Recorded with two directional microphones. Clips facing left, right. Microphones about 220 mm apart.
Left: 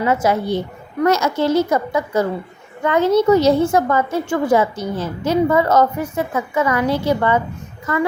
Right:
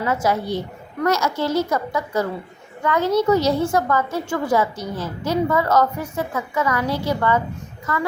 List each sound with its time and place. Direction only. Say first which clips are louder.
0.0 s a woman's voice: left 4 dB; 25° left (ahead or behind)